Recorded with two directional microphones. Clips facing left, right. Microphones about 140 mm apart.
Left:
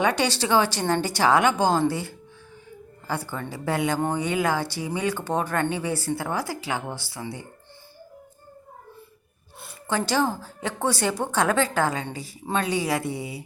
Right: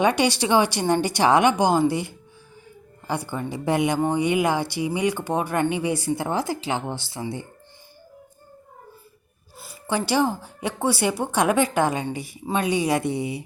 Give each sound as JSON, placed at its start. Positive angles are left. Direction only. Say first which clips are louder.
{"t": 0.0, "sound": "a woman's voice", "louder": "right 3 dB", "side_deg": -15}
{"t": 9.8, "sound": "a woman's voice", "louder": "right 2 dB", "side_deg": -10}